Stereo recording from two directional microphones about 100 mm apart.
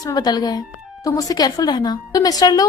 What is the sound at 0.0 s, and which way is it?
A woman's voice, 40° left (ahead or behind).